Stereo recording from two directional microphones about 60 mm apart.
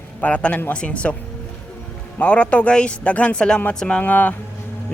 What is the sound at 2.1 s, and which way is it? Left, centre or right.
Speech, left.